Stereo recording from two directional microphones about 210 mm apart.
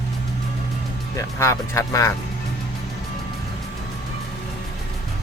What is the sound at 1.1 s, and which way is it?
Speech, 15° left (ahead or behind).